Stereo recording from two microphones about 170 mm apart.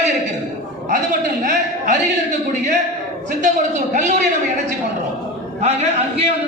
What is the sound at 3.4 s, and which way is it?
A woman's voice, 45° right (ahead or behind).